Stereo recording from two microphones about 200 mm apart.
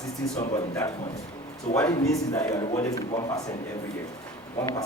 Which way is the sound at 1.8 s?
15° left (ahead or behind).